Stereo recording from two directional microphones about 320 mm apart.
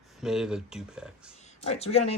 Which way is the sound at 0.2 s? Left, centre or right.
Centre.